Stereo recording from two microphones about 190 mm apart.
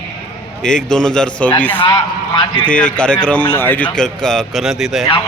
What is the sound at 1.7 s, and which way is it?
Speech, 25° left (ahead or behind).